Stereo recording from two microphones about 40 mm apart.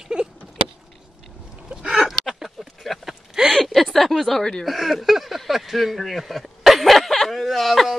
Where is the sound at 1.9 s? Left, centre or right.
Centre.